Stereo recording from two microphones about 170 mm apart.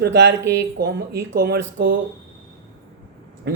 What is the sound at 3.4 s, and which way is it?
Speech, 75° right (ahead or behind).